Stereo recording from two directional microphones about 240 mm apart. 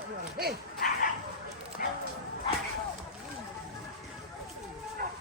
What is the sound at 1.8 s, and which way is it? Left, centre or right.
Speech, left.